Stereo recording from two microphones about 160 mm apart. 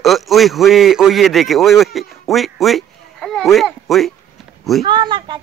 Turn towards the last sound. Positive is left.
turn(degrees=-30)  # may be behind; listen again after turning